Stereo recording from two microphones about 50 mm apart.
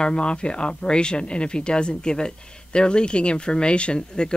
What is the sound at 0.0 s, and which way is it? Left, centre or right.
Speech, centre.